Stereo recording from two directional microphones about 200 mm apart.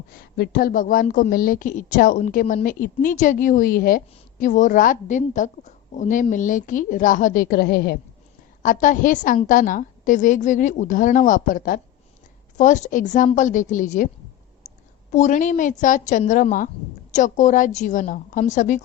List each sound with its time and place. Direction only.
0.2 s a woman's voice: 55° left (ahead or behind)
8.6 s a woman's voice: 40° left (ahead or behind)
15.1 s a woman's voice: 35° left (ahead or behind)